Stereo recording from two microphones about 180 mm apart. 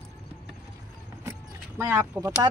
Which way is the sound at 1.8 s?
15° right (ahead or behind).